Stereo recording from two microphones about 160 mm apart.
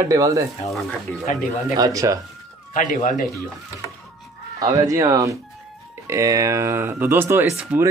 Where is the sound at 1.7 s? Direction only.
20° right (ahead or behind).